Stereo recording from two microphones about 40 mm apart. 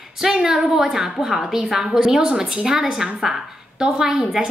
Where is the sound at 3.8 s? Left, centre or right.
Right.